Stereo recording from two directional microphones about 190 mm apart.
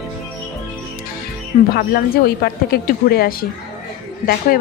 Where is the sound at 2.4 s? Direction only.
55° left (ahead or behind).